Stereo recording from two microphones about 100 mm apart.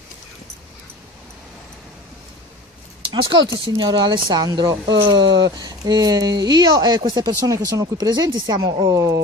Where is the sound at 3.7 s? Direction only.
50° right (ahead or behind).